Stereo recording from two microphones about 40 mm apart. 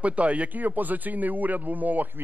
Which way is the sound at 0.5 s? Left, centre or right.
Right.